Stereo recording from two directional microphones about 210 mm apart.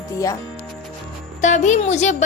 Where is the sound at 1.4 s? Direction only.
35° left (ahead or behind).